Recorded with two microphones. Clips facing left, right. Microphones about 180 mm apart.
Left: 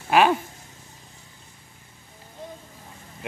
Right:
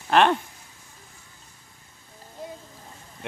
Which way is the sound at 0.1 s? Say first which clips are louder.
Left 1 dB; 5° left (ahead or behind).